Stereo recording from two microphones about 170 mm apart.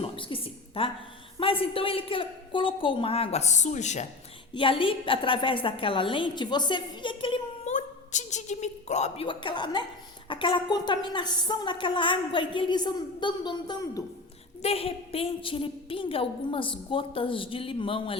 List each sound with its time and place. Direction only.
0.0 s a sound: 30° left (ahead or behind)
1.4 s a woman's voice: 30° left (ahead or behind)
4.5 s a woman's voice: 30° left (ahead or behind)
7.7 s a sound: 45° left (ahead or behind)
9.2 s a woman's voice: 30° left (ahead or behind)
14.6 s a woman's voice: 35° left (ahead or behind)